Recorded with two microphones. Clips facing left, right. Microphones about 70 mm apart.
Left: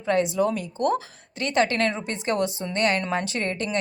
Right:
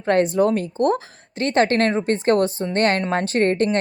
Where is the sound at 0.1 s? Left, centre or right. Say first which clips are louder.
Right 5 dB; right.